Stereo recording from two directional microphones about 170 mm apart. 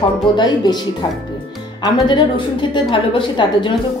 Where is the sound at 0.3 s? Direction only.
30° left (ahead or behind).